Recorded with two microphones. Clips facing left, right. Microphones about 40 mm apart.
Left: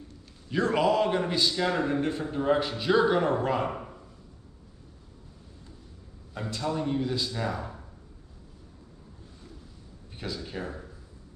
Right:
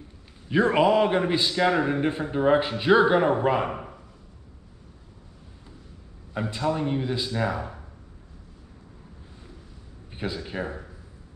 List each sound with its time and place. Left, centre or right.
0.5 s a man's voice: right
6.3 s a man's voice: right
10.1 s a man's voice: right